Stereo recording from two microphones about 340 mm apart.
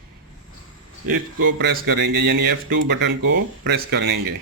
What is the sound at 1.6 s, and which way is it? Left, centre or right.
Speech, right.